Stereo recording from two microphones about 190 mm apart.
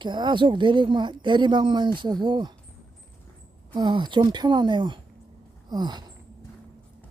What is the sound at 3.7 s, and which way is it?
A woman's voice, 25° right (ahead or behind).